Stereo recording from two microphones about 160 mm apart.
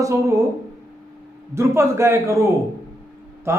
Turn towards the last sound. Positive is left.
turn(degrees=-15)  # may be behind; listen again after turning